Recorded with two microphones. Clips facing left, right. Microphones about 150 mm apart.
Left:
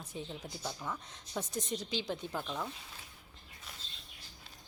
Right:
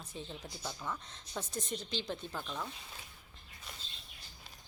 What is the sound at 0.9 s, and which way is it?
Speech, 15° left (ahead or behind).